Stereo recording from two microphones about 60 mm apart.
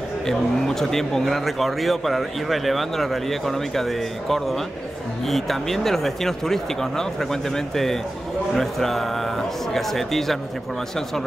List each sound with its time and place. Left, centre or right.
0.3 s speech: centre